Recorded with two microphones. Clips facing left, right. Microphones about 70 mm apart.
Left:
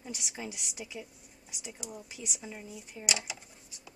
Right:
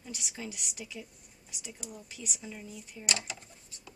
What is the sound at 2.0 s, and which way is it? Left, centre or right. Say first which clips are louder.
Speech: left 1 dB; centre.